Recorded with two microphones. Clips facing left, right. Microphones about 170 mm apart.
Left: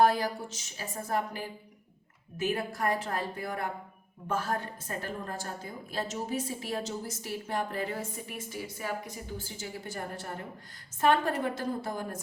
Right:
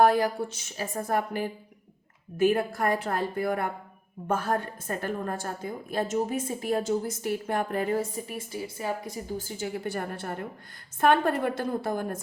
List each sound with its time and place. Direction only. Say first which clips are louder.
0.0 s a woman's voice: right 4 dB; 55° right (ahead or behind)
8.1 s a woman's voice: right 4 dB; 35° right (ahead or behind)
9.4 s a woman's voice: right 8 dB; 50° right (ahead or behind)